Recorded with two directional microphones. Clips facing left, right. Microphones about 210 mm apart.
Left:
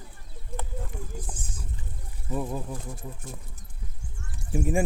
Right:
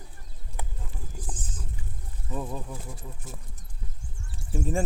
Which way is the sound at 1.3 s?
10° left (ahead or behind).